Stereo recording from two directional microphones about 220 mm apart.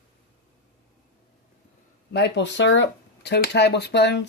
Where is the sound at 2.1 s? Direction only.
50° left (ahead or behind).